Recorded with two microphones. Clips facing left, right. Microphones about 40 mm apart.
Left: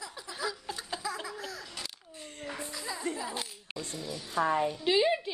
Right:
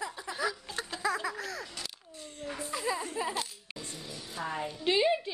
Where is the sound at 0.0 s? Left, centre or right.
Right.